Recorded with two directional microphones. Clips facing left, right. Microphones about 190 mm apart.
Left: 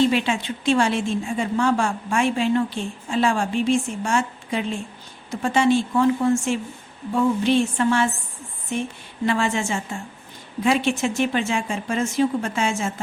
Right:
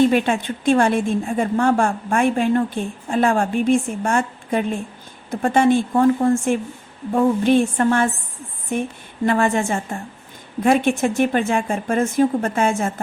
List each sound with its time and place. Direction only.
0.0 s a woman's voice: 50° right (ahead or behind)